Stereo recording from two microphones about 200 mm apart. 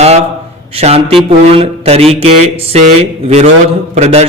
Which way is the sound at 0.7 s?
30° right (ahead or behind).